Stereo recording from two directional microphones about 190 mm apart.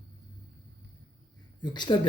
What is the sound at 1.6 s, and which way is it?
Speech, 25° left (ahead or behind).